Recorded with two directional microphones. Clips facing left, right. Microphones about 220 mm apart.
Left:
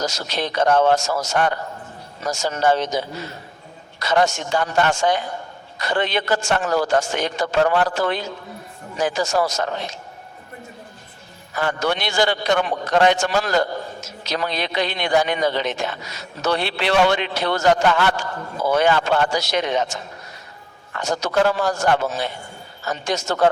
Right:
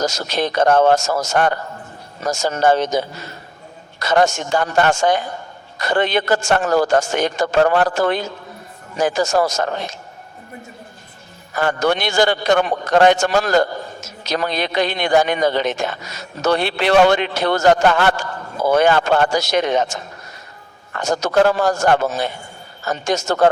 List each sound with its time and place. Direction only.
0.0 s a man's voice: 45° right (ahead or behind)
11.5 s a man's voice: 45° right (ahead or behind)